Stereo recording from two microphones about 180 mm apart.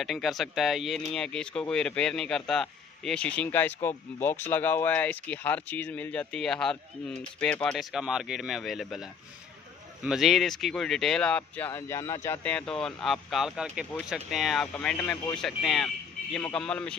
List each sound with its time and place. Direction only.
0.0 s speech: centre (ahead or behind)